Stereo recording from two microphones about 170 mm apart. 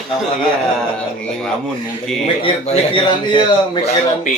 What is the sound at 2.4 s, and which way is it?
Speech, 35° left (ahead or behind).